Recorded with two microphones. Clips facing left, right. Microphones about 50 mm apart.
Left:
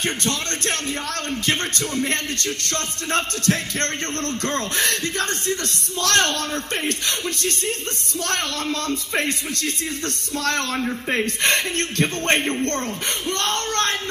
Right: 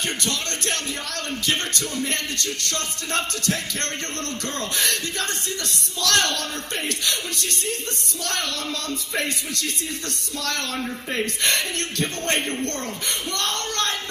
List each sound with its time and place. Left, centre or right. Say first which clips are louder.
0.0 s speech: left 2 dB; left
11.1 s speech: left 3 dB; left